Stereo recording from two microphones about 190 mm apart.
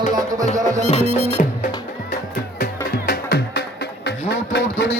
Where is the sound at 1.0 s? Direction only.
35° right (ahead or behind).